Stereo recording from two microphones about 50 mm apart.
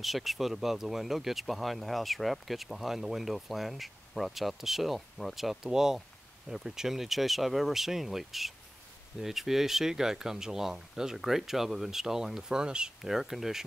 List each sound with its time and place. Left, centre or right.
0.0 s speech: centre
13.0 s speech: centre